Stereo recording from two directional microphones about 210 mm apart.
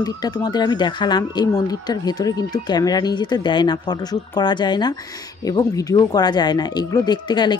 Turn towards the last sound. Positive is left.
turn(degrees=20)  # may be behind; listen again after turning